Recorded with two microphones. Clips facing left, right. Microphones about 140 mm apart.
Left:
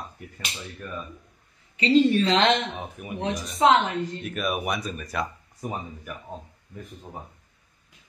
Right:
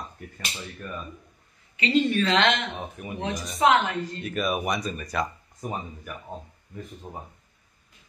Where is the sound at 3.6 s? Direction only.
20° left (ahead or behind).